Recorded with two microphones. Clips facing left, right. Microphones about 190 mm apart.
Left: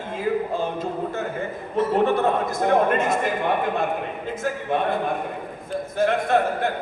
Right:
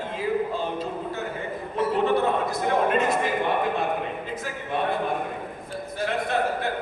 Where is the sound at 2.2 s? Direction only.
45° left (ahead or behind).